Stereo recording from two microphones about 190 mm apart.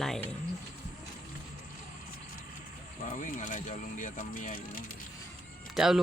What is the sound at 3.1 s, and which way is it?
Speech, 45° left (ahead or behind).